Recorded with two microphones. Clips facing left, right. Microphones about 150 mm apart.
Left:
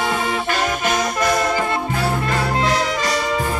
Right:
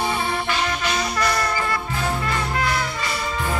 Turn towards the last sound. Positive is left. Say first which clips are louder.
# left 5 dB
turn(degrees=90)